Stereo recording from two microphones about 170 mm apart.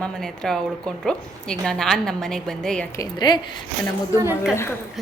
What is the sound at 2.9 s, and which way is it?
Speech, 25° left (ahead or behind).